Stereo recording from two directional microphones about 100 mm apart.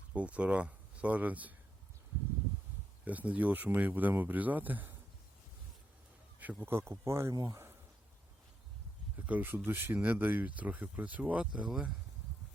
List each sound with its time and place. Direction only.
0.1 s speech: 15° right (ahead or behind)
3.0 s speech: 15° right (ahead or behind)
6.4 s speech: 15° right (ahead or behind)
7.3 s speech: 40° right (ahead or behind)
9.1 s speech: 15° right (ahead or behind)